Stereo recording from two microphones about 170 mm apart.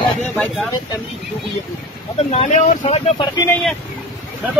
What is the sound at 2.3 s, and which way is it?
Speech, 40° left (ahead or behind).